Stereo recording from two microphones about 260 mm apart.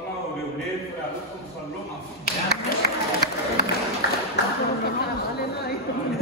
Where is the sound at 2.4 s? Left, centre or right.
Left.